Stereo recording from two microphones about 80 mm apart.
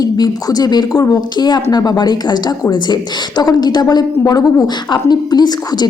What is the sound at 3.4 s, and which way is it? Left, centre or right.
A woman's voice, left.